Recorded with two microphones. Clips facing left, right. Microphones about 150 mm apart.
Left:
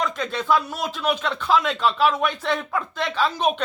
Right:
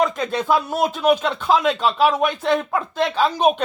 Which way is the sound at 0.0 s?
45° right (ahead or behind).